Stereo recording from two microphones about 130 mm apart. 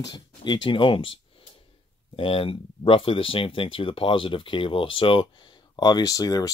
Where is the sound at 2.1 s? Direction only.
45° left (ahead or behind).